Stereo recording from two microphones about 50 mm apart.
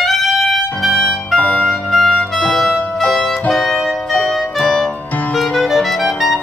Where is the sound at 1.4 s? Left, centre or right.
Left.